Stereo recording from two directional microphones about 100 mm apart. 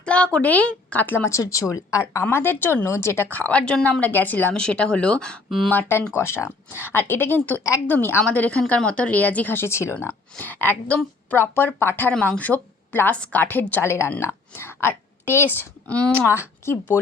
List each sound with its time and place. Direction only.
0.0 s a woman's voice: 10° left (ahead or behind)
1.3 s speech: 30° left (ahead or behind)
2.2 s speech: 20° left (ahead or behind)
3.2 s speech: 15° left (ahead or behind)
4.0 s speech: 15° left (ahead or behind); by 5.7 s centre (ahead or behind)
5.7 s a woman's voice: 20° left (ahead or behind)